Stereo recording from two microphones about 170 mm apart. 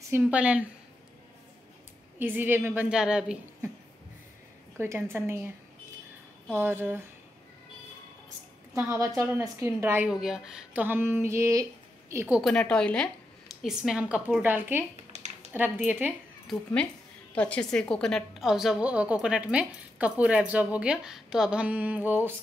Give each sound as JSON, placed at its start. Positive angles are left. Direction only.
{"t": 0.1, "sound": "a woman's voice", "side_deg": -10}
{"t": 2.1, "sound": "a woman's voice", "side_deg": -10}
{"t": 4.7, "sound": "a woman's voice", "side_deg": -15}
{"t": 6.5, "sound": "a woman's voice", "side_deg": -15}
{"t": 8.7, "sound": "a woman's voice", "side_deg": -15}
{"t": 12.4, "sound": "a woman's voice", "side_deg": 5}
{"t": 16.5, "sound": "a woman's voice", "side_deg": 0}